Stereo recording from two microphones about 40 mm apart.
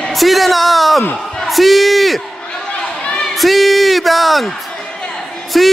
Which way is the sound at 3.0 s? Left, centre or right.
Left.